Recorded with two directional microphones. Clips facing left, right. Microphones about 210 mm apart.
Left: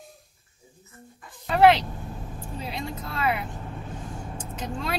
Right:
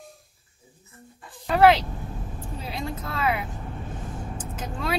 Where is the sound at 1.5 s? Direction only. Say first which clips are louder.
Even; centre (ahead or behind).